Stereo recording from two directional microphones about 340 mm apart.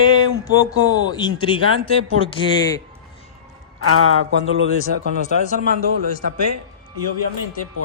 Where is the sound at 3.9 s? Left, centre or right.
Right.